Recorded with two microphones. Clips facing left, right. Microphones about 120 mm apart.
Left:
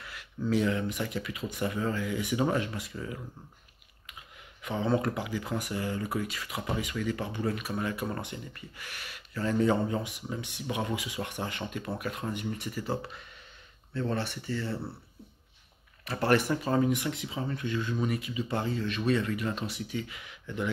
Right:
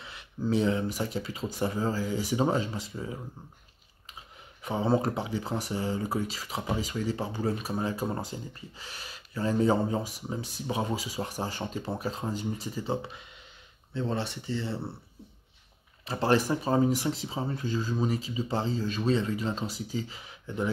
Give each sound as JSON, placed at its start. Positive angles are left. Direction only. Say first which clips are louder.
{"t": 0.0, "sound": "speech", "louder": "right 1 dB", "side_deg": -25}
{"t": 4.6, "sound": "speech", "louder": "right 2 dB", "side_deg": -30}
{"t": 16.1, "sound": "speech", "louder": "right 1 dB", "side_deg": -25}